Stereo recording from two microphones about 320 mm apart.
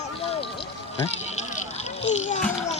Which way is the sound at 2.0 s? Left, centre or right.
Left.